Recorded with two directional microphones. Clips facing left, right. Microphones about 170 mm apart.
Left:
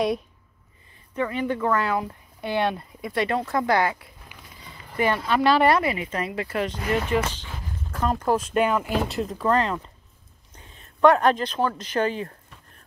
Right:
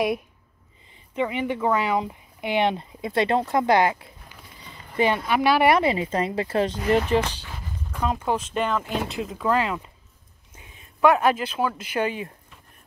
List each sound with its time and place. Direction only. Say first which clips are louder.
1.1 s speech: even; 15° right (ahead or behind)
5.2 s speech: left 2 dB; 10° right (ahead or behind)
5.8 s speech: right 3 dB; 25° right (ahead or behind)
8.0 s speech: left 2 dB; centre (ahead or behind)